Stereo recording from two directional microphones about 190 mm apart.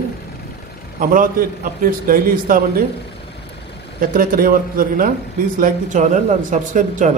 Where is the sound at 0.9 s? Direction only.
45° right (ahead or behind).